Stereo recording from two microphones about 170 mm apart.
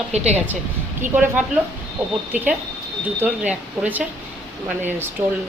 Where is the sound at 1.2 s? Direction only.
10° right (ahead or behind).